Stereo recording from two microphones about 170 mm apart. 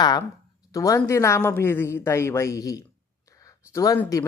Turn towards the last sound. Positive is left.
turn(degrees=20)  # may be behind; listen again after turning